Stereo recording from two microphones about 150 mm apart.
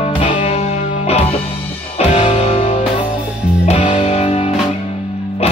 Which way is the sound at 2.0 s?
40° left (ahead or behind).